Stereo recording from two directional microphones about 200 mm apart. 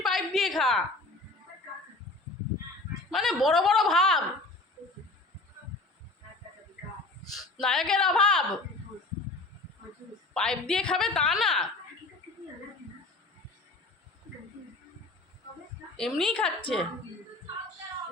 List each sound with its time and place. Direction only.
0.0 s a sound: centre (ahead or behind)
3.1 s a woman's voice: centre (ahead or behind)
7.3 s speech: centre (ahead or behind)
10.3 s a woman's voice: 5° left (ahead or behind)
16.0 s a woman's voice: centre (ahead or behind)